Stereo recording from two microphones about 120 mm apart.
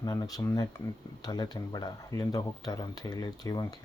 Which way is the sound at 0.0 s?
35° left (ahead or behind).